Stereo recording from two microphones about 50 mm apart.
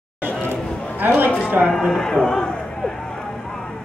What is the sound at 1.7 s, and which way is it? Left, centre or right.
A man's voice, centre.